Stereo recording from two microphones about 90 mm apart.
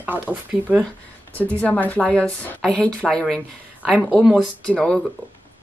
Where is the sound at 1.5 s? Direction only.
15° left (ahead or behind).